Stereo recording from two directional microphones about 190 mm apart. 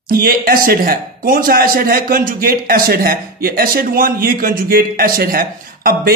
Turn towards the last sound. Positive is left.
turn(degrees=-50)  # may be behind; listen again after turning